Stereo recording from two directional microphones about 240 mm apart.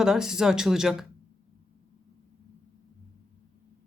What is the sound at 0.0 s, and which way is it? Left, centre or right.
Speech, centre.